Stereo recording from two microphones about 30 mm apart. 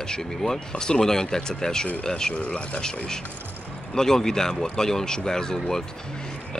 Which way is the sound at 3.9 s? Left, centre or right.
Centre.